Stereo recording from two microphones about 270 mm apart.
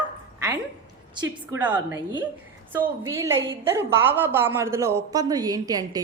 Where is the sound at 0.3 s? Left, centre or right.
Centre.